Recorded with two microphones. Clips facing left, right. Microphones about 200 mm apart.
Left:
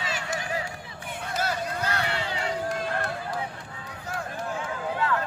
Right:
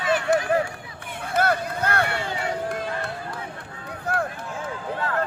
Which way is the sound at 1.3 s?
55° right (ahead or behind).